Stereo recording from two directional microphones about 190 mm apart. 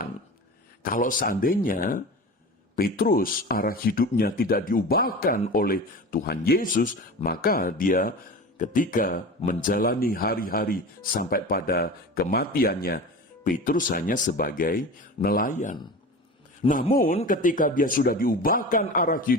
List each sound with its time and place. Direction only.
0.8 s speech: 45° left (ahead or behind)
16.6 s a man's voice: 30° left (ahead or behind)
17.2 s speech: 45° left (ahead or behind)